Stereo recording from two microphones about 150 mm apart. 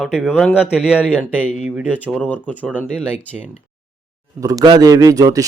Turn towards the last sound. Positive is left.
turn(degrees=-25)  # may be behind; listen again after turning